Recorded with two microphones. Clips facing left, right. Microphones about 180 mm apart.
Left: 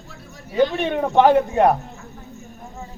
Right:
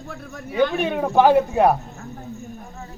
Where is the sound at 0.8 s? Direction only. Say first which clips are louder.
Even; 5° right (ahead or behind).